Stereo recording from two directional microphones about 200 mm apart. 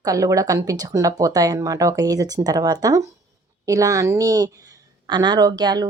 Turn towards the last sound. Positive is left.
turn(degrees=-20)  # may be behind; listen again after turning